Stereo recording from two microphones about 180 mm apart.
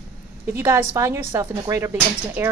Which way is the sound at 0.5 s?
15° right (ahead or behind).